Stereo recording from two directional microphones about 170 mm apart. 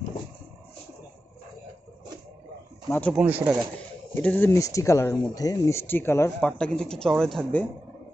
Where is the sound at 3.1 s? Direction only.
10° right (ahead or behind).